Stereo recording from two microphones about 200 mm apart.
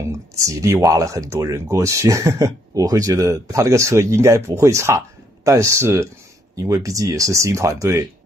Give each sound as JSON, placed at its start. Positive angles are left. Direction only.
{"t": 0.5, "sound": "speech", "side_deg": -15}